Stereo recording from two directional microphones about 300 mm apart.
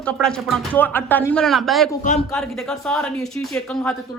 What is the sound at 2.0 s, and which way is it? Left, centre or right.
Speech, left.